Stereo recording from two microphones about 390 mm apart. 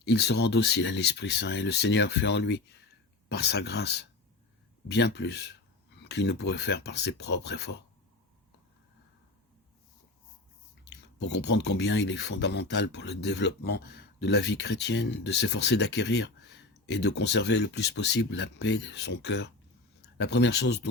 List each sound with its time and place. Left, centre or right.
0.0 s speech: left
10.8 s speech: left